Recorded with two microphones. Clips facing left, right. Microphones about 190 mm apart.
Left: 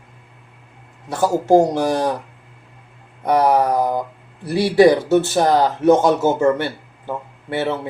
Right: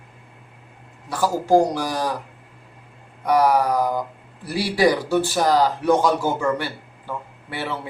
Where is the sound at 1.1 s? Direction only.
25° left (ahead or behind).